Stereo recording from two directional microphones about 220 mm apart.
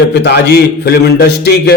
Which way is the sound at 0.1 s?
50° left (ahead or behind).